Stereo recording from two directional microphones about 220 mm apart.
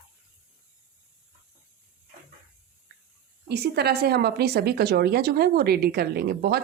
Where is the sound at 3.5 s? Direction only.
50° right (ahead or behind).